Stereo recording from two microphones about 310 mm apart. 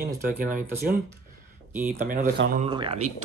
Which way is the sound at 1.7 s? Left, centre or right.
Centre.